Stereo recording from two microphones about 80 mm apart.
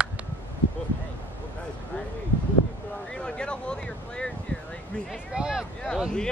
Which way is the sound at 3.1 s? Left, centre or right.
Centre.